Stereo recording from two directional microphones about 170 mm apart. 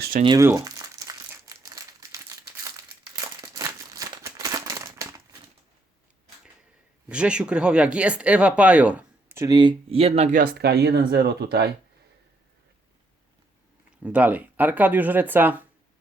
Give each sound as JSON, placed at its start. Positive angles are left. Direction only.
{"t": 0.0, "sound": "speech", "side_deg": -60}
{"t": 0.3, "sound": "crumpling", "side_deg": -20}
{"t": 3.4, "sound": "crumpling", "side_deg": -20}
{"t": 7.1, "sound": "speech", "side_deg": -5}
{"t": 10.4, "sound": "speech", "side_deg": -70}
{"t": 14.0, "sound": "speech", "side_deg": -10}